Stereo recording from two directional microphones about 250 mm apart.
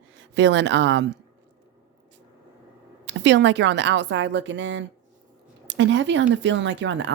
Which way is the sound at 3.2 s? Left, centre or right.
Right.